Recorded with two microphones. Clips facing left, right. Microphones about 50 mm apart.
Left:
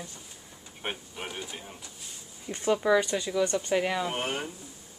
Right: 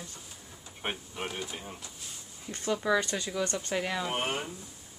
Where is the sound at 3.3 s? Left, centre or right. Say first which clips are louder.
Left 5 dB; centre.